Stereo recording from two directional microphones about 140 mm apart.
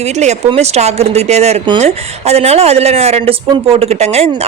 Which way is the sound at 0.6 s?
50° right (ahead or behind).